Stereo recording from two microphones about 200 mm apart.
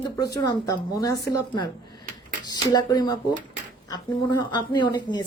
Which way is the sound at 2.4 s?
20° left (ahead or behind).